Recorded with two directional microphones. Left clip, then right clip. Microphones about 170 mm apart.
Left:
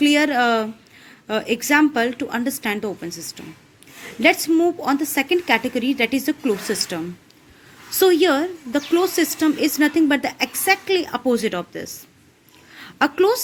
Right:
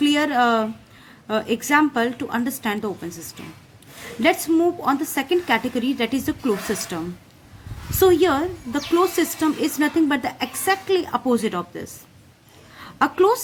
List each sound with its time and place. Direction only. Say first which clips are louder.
0.0 s a woman's voice: left 2 dB; 20° left (ahead or behind)
4.2 s a woman's voice: left 2 dB; 20° left (ahead or behind)
7.9 s a woman's voice: left 1 dB; 20° left (ahead or behind)
12.7 s a sound: left 1 dB; 25° left (ahead or behind)